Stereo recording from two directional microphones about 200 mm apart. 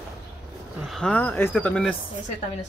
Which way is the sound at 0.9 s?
5° left (ahead or behind).